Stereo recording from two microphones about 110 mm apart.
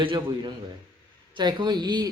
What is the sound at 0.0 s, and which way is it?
Speech, 50° right (ahead or behind).